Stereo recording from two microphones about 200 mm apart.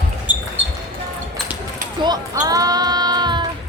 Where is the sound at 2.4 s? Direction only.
20° right (ahead or behind).